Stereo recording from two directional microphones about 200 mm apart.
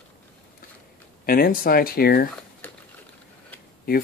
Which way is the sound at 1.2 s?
45° left (ahead or behind).